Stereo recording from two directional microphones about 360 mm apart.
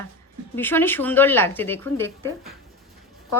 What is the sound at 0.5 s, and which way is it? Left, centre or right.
A woman's voice, centre.